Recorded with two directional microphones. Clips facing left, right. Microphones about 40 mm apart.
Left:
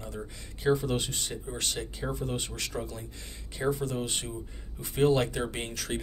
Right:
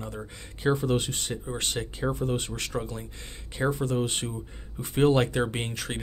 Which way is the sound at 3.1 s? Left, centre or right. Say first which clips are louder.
Right 2 dB; right.